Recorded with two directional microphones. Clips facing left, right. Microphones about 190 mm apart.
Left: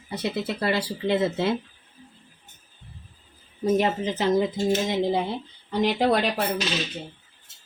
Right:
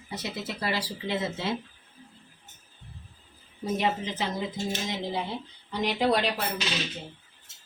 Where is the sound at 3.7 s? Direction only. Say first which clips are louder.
Left 2 dB; 50° left (ahead or behind).